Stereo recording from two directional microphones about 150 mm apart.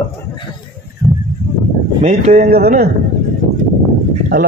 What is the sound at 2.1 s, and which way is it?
Speech, 45° right (ahead or behind).